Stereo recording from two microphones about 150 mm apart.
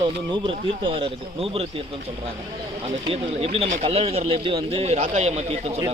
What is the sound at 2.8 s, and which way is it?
A man's voice, 45° right (ahead or behind).